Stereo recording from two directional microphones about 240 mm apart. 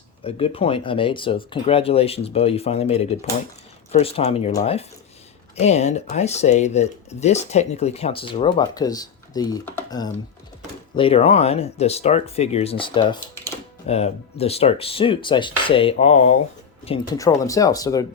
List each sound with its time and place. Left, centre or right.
0.3 s speech: left